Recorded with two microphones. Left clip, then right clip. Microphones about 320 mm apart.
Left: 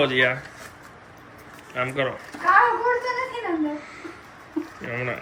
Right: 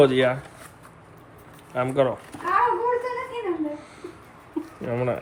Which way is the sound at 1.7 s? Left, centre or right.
Centre.